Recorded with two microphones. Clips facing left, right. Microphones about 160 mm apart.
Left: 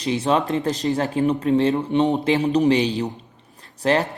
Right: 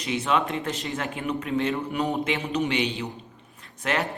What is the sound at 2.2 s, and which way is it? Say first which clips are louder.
Speech: left 8 dB; 35° left (ahead or behind).